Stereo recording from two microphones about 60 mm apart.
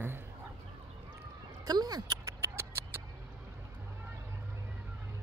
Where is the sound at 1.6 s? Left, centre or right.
Right.